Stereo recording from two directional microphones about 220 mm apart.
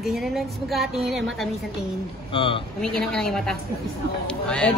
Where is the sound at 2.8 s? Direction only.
5° left (ahead or behind).